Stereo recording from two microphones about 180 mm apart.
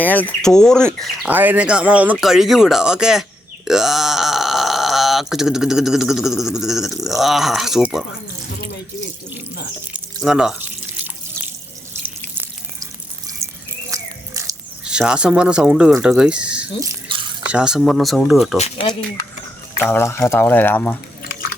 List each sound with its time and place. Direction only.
0.0 s speech: 10° left (ahead or behind)
1.3 s speech: 10° right (ahead or behind)
10.2 s drip: 5° right (ahead or behind)
13.4 s water: 15° right (ahead or behind)
13.9 s a sound: 15° right (ahead or behind)
14.8 s speech: 5° right (ahead or behind)
18.5 s speech: 35° left (ahead or behind)
19.8 s speech: 15° left (ahead or behind)